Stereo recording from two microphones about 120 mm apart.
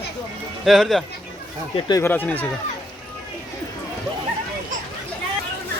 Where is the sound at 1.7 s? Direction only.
40° left (ahead or behind).